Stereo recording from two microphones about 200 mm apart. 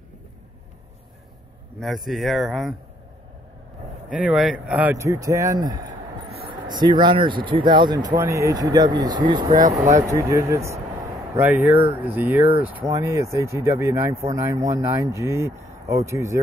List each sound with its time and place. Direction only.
1.8 s speech: centre (ahead or behind)
4.1 s speech: 5° right (ahead or behind)